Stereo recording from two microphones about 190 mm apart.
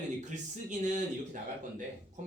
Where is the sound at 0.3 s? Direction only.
40° right (ahead or behind).